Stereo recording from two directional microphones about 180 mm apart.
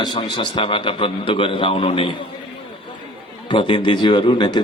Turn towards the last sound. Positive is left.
turn(degrees=25)  # may be behind; listen again after turning